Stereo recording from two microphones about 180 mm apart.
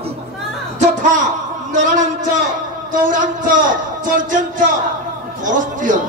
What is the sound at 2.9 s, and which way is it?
A man's voice, 45° right (ahead or behind).